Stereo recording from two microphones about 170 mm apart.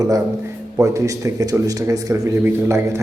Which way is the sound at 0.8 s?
20° right (ahead or behind).